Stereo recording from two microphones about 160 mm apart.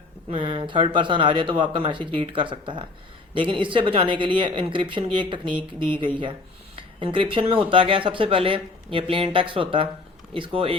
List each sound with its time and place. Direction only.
0.3 s speech: 35° right (ahead or behind)